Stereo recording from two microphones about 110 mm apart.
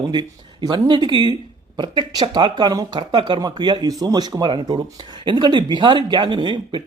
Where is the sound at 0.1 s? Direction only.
40° right (ahead or behind).